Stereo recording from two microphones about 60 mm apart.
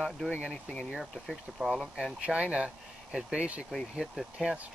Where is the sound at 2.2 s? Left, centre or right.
Centre.